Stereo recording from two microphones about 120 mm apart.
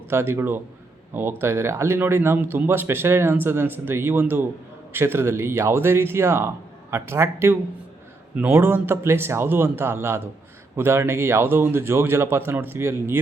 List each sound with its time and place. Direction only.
0.1 s speech: 20° right (ahead or behind)